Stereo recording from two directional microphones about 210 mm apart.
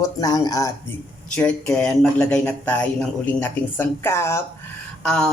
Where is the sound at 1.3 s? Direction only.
5° left (ahead or behind).